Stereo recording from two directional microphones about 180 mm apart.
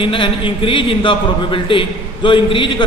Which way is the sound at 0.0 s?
30° left (ahead or behind).